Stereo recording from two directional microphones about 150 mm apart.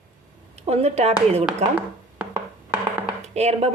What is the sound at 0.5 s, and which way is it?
Speech, 45° right (ahead or behind).